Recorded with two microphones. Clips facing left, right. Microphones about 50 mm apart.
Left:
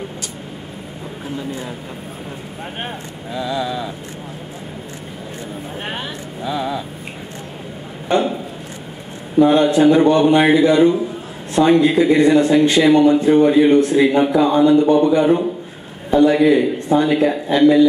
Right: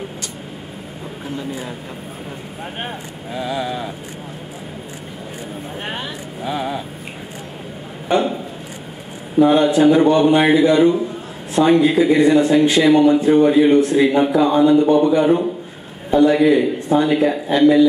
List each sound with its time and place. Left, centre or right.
2.6 s a man's voice: centre
3.3 s speech: right
5.8 s vehicle: centre
6.4 s speech: right
8.1 s speech: centre
9.4 s a man's voice: centre